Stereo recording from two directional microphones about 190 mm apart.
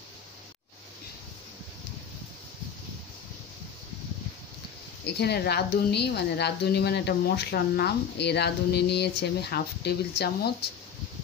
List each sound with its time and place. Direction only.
5.0 s a woman's voice: 60° left (ahead or behind)